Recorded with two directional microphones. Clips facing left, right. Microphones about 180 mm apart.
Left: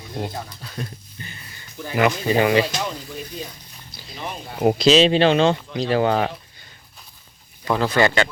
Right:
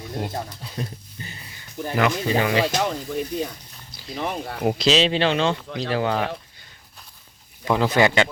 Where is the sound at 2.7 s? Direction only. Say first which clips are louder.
Right 4 dB; 60° right (ahead or behind).